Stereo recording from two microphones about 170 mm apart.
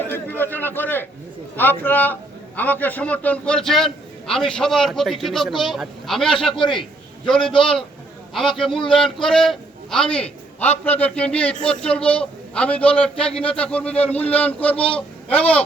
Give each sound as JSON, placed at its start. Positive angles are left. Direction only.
{"t": 0.1, "sound": "a sound", "side_deg": 10}
{"t": 1.5, "sound": "a man's voice", "side_deg": 10}
{"t": 6.6, "sound": "a man's voice", "side_deg": 30}
{"t": 7.3, "sound": "a man's voice", "side_deg": 5}
{"t": 7.5, "sound": "a man's voice", "side_deg": 30}
{"t": 8.3, "sound": "a man's voice", "side_deg": 0}